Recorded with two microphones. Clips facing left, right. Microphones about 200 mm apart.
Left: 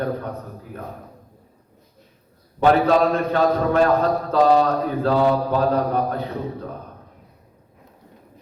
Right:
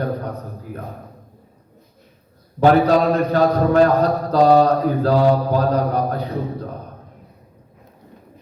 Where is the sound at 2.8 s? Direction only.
40° right (ahead or behind).